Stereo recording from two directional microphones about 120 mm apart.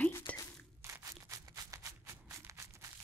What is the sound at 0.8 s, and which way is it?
Scissors, 30° right (ahead or behind).